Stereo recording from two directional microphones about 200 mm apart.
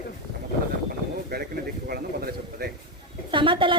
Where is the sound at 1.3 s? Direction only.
55° right (ahead or behind).